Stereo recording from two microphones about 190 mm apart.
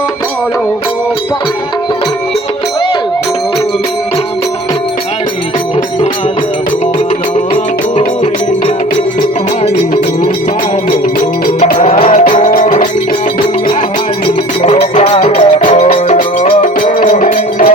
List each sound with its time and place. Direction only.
7.5 s music: 40° left (ahead or behind)
11.4 s music: 40° left (ahead or behind)
12.3 s music: 45° left (ahead or behind)
14.6 s music: 35° left (ahead or behind)
15.5 s music: 40° left (ahead or behind)